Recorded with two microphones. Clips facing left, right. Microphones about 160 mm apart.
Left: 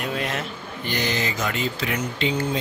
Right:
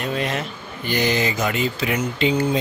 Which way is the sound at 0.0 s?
Centre (ahead or behind).